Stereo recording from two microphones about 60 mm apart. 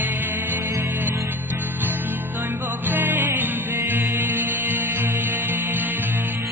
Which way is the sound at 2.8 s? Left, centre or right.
Right.